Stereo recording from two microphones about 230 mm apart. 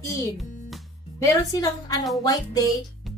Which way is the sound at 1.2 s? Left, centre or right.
Centre.